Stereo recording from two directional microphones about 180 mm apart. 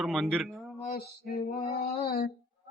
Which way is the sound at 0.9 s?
55° left (ahead or behind).